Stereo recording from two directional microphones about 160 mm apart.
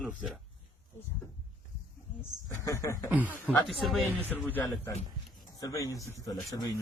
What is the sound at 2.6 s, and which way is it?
Speech, 20° left (ahead or behind).